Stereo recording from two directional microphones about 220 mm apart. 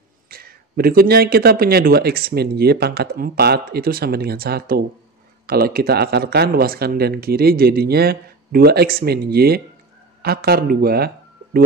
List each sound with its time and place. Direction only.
0.3 s speech: 45° right (ahead or behind)